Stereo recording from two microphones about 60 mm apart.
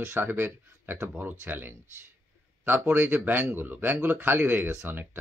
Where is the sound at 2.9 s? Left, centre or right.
Right.